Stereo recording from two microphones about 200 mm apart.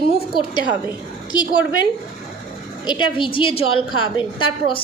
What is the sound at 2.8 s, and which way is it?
A woman's voice, 25° left (ahead or behind).